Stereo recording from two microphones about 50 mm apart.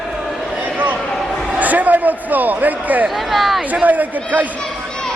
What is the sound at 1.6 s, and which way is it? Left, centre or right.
A man's voice, right.